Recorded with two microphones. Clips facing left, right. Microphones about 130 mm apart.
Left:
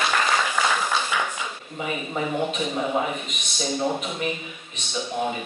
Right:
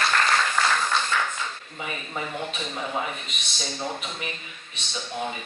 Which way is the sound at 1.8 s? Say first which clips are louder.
Left 5 dB; 10° left (ahead or behind).